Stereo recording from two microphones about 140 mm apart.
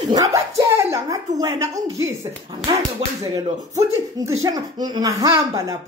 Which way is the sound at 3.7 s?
25° right (ahead or behind).